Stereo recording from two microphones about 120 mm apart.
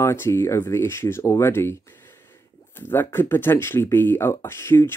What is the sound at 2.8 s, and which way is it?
Speech, 15° left (ahead or behind).